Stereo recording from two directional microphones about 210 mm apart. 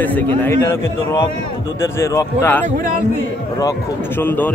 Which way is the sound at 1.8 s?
15° left (ahead or behind).